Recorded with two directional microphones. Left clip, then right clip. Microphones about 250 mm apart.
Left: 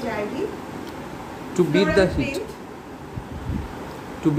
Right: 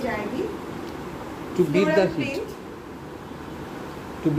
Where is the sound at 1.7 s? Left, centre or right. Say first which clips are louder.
Left 2 dB; centre.